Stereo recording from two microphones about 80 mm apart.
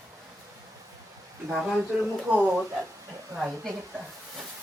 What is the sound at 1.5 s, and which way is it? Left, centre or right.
Speech, centre.